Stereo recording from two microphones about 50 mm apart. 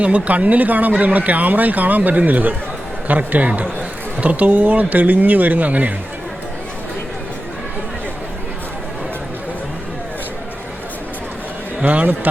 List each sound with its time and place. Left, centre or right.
0.0 s speech: right
11.9 s speech: right